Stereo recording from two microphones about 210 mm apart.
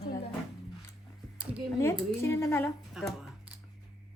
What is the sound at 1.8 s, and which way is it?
Speech, 15° left (ahead or behind).